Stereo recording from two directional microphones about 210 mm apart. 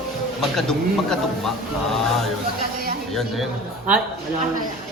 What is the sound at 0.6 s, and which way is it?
A man's voice, centre (ahead or behind).